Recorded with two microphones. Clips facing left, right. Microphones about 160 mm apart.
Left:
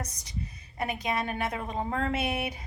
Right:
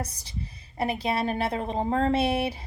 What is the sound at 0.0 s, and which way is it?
A woman's voice, 30° right (ahead or behind).